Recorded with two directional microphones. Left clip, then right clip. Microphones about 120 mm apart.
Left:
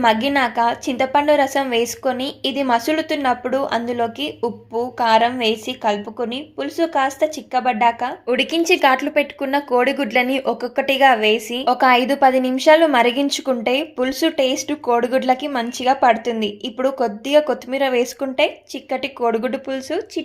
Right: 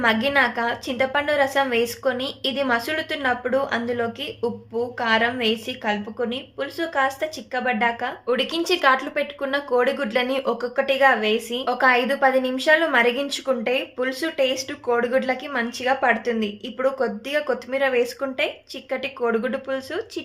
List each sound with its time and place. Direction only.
0.0 s a woman's voice: 45° left (ahead or behind)